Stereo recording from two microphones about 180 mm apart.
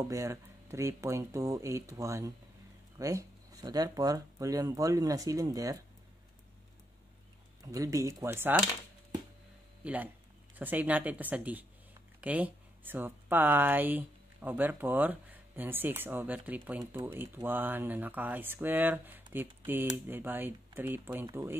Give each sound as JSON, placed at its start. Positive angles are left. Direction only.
{"t": 0.0, "sound": "speech", "side_deg": -20}
{"t": 7.6, "sound": "speech", "side_deg": -20}
{"t": 9.8, "sound": "speech", "side_deg": -10}